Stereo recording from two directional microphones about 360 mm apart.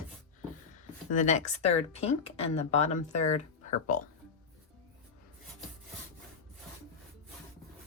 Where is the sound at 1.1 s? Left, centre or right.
Centre.